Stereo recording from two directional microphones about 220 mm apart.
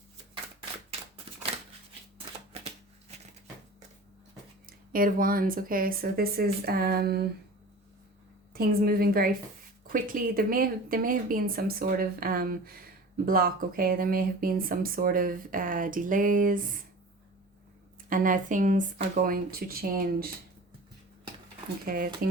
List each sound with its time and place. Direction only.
2.5 s shuffling cards: 30° right (ahead or behind)
4.9 s speech: 40° right (ahead or behind)
8.5 s a woman's voice: 45° right (ahead or behind)
18.1 s speech: 40° right (ahead or behind)
21.8 s speech: 40° right (ahead or behind)